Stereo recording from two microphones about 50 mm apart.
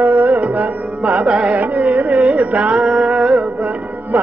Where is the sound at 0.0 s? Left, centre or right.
Right.